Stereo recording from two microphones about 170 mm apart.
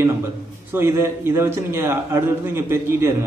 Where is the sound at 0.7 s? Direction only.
15° right (ahead or behind).